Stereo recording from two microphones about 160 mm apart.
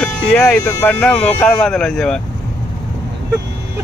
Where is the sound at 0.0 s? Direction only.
5° left (ahead or behind).